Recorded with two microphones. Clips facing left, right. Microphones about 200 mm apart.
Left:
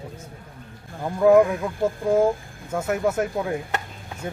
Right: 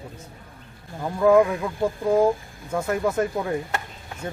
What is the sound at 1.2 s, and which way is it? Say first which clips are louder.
Speech: left 1 dB; 5° left (ahead or behind).